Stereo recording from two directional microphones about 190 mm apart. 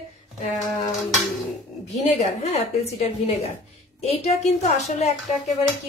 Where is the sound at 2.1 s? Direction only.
35° left (ahead or behind).